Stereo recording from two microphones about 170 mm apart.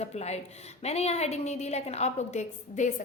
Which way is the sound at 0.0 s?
40° left (ahead or behind).